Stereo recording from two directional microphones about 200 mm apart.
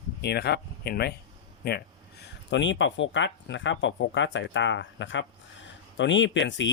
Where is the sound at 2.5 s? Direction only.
65° left (ahead or behind).